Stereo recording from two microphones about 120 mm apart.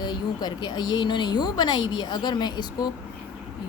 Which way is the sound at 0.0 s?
35° left (ahead or behind).